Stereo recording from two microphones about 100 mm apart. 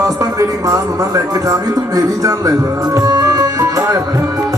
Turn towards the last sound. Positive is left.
turn(degrees=-35)  # may be behind; listen again after turning